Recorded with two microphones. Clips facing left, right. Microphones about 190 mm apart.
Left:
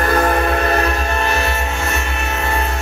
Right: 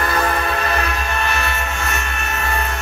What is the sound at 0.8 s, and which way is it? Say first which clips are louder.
Music: left 4 dB; 35° left (ahead or behind).